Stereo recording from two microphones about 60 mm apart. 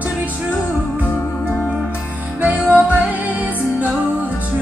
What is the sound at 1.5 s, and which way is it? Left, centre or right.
Music, left.